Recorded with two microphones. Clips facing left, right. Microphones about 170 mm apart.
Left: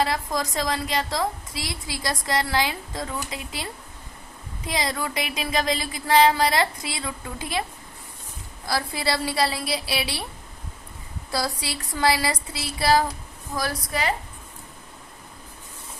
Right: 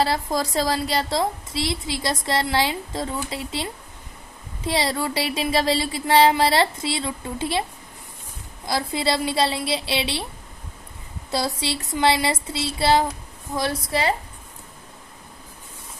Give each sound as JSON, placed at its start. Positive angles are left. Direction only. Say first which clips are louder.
{"t": 0.0, "sound": "a woman's voice", "louder": "right 3 dB", "side_deg": -30}
{"t": 8.6, "sound": "a woman's voice", "louder": "right 3 dB", "side_deg": -20}
{"t": 11.3, "sound": "a woman's voice", "louder": "right 3 dB", "side_deg": -25}